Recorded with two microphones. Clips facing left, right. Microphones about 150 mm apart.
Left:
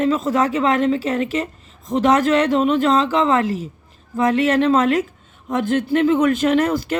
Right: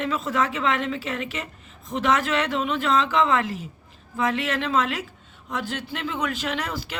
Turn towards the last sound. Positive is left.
turn(degrees=45)  # may be behind; listen again after turning